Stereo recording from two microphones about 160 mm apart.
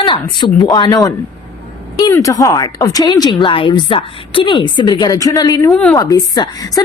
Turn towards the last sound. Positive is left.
turn(degrees=25)  # may be behind; listen again after turning